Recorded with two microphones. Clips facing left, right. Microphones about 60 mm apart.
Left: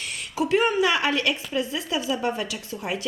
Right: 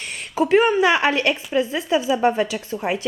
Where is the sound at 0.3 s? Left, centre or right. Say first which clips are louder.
Right 5 dB; right.